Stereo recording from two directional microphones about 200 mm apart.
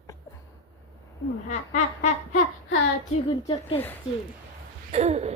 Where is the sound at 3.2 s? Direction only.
25° left (ahead or behind).